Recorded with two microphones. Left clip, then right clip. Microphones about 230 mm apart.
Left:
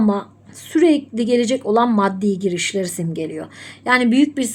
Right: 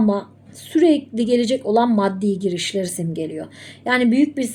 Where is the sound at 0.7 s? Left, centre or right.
Centre.